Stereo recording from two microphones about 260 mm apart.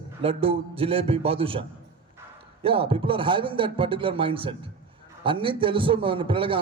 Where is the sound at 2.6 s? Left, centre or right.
Right.